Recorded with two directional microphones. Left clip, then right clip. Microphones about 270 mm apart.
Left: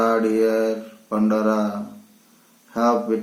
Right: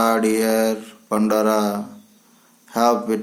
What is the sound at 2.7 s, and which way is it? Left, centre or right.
Speech, right.